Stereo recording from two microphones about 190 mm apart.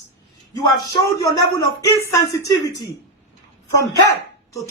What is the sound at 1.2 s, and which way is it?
Speech, 20° left (ahead or behind).